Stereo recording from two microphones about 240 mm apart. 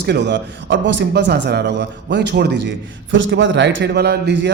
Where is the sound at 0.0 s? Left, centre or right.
Right.